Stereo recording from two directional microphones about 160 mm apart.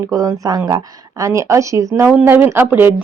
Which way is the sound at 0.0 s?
20° right (ahead or behind).